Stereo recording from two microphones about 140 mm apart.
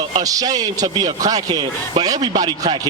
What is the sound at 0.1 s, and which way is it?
A man's voice, 25° right (ahead or behind).